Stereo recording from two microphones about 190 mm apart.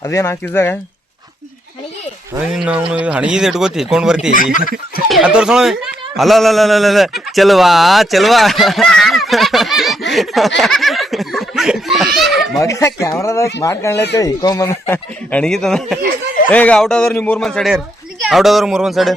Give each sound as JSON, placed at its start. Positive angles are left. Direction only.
{"t": 0.0, "sound": "speech", "side_deg": 15}
{"t": 2.4, "sound": "speech", "side_deg": -5}
{"t": 12.6, "sound": "speech", "side_deg": 15}
{"t": 13.9, "sound": "speech", "side_deg": 65}
{"t": 14.2, "sound": "speech", "side_deg": 20}